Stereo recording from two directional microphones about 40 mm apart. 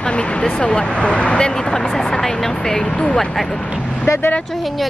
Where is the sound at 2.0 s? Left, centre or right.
Centre.